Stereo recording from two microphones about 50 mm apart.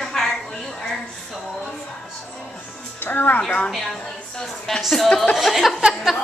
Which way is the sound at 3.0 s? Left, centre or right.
Left.